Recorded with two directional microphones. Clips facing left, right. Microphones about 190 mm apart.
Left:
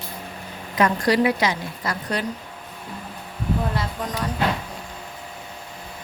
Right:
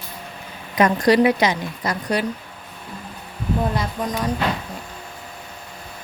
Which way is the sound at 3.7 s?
15° right (ahead or behind).